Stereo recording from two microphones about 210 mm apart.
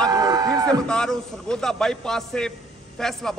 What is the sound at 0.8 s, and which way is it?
A man's voice, 5° left (ahead or behind).